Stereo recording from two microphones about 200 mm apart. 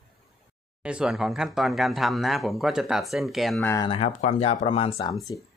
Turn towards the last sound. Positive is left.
turn(degrees=15)  # may be behind; listen again after turning